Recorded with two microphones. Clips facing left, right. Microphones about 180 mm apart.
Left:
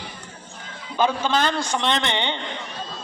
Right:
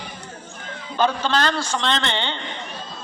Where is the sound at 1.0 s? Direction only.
10° left (ahead or behind).